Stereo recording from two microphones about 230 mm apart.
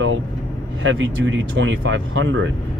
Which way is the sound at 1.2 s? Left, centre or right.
Right.